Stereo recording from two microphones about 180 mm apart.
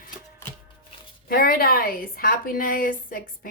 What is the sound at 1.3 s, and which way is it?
A woman's voice, 55° left (ahead or behind).